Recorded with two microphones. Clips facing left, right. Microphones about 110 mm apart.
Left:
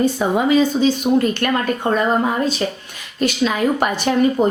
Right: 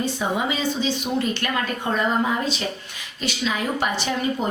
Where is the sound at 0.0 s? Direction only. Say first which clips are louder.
Left 7 dB; 50° left (ahead or behind).